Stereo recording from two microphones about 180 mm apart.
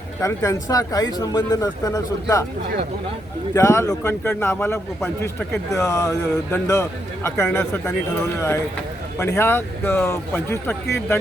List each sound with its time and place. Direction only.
0.2 s a man's voice: 15° left (ahead or behind)
3.5 s a man's voice: 15° left (ahead or behind)